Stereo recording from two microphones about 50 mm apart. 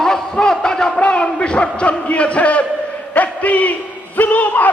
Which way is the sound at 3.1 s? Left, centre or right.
Left.